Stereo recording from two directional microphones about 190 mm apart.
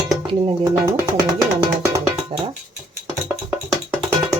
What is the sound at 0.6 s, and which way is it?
Speech, 15° right (ahead or behind).